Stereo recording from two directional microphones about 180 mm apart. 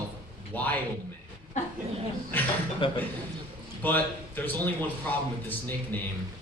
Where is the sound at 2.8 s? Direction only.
30° left (ahead or behind).